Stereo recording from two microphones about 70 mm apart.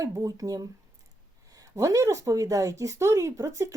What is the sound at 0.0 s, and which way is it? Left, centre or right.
A woman's voice, right.